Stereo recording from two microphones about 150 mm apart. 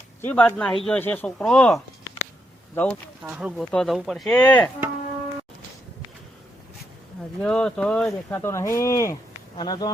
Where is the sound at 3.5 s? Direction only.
5° left (ahead or behind).